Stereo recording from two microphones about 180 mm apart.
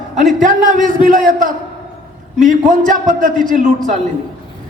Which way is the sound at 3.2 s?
45° right (ahead or behind).